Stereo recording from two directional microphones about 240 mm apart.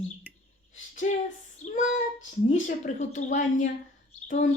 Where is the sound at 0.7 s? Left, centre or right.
Left.